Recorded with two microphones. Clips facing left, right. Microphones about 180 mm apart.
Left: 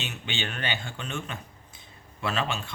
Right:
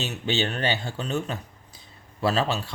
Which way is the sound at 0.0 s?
40° right (ahead or behind).